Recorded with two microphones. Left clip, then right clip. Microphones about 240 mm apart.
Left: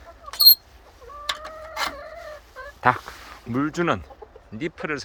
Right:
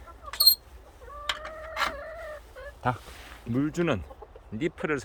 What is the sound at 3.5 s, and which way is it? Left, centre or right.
Speech, centre.